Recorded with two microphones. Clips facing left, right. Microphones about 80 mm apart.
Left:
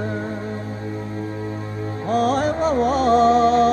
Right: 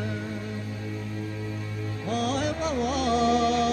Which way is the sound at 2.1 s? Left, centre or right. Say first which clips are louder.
Left 8 dB; left.